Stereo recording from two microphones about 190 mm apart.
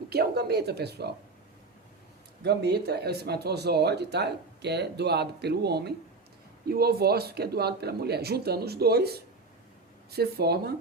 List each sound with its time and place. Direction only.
0.1 s speech: 55° right (ahead or behind)
2.4 s speech: 60° right (ahead or behind)